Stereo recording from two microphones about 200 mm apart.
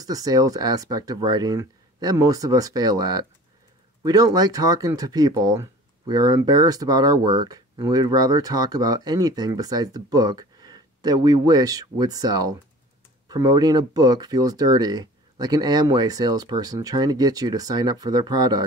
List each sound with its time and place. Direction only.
0.0 s speech: 20° right (ahead or behind)